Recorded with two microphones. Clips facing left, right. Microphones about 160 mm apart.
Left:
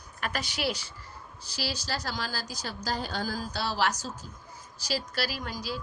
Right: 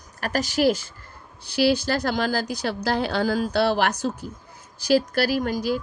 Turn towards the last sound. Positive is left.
turn(degrees=-50)  # may be behind; listen again after turning